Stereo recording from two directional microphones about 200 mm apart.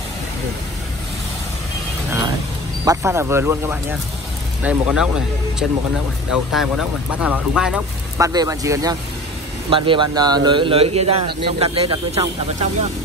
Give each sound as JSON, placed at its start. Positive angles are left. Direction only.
{"t": 2.8, "sound": "speech", "side_deg": -15}
{"t": 6.3, "sound": "speech", "side_deg": 0}
{"t": 8.2, "sound": "speech", "side_deg": -15}